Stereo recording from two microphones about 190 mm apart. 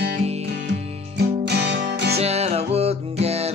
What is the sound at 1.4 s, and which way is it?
Music, 65° right (ahead or behind).